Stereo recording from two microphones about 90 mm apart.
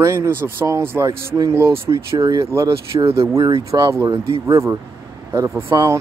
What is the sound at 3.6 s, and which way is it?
Speech, 35° right (ahead or behind).